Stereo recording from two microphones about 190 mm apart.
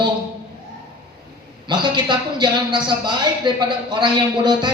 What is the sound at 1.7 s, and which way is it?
A man's voice, 25° right (ahead or behind).